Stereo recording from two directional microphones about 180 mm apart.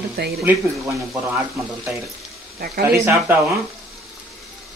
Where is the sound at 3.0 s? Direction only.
15° right (ahead or behind).